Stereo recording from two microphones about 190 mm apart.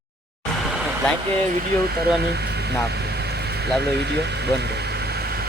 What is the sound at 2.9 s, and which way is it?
Vehicle, 60° right (ahead or behind).